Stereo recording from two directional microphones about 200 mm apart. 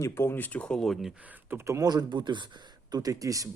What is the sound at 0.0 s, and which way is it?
Speech, 10° left (ahead or behind).